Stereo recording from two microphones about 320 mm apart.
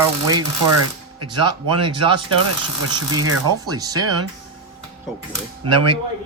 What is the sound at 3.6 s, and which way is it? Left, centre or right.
Speech, centre.